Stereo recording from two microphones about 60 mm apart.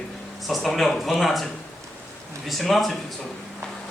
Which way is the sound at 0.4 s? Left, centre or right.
Centre.